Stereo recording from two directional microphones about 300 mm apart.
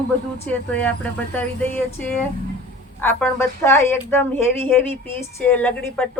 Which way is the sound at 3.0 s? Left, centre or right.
Centre.